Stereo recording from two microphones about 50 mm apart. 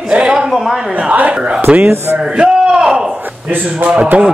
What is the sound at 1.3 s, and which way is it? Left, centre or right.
A man's voice, right.